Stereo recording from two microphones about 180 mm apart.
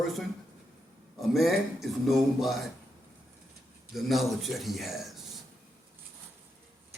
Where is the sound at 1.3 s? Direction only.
Centre (ahead or behind).